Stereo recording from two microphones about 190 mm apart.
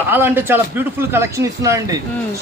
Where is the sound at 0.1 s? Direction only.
10° right (ahead or behind).